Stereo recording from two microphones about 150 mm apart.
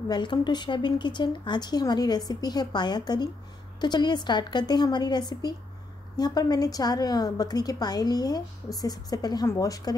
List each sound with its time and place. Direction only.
0.1 s speech: 30° left (ahead or behind)